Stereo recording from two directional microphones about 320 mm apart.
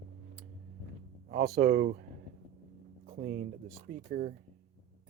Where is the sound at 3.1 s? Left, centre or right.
Right.